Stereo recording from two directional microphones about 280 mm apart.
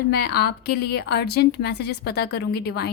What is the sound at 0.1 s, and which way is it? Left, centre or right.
A woman's voice, left.